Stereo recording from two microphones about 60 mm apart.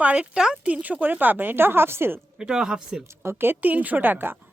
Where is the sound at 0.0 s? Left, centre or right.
Centre; by 2.1 s right.